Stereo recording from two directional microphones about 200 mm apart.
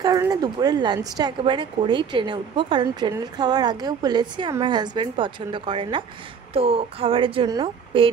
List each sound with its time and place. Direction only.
0.0 s a woman's voice: 20° right (ahead or behind)